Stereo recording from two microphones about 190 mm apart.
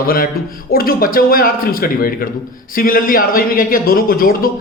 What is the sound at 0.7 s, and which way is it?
Speech, 50° left (ahead or behind).